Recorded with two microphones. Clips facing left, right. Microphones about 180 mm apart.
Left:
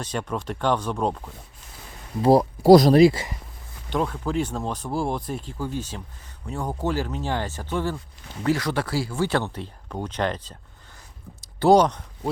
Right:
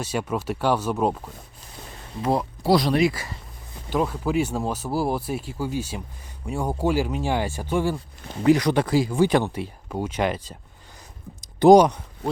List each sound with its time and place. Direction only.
0.0 s speech: 10° right (ahead or behind)
2.2 s speech: 35° left (ahead or behind)
3.8 s speech: 5° right (ahead or behind)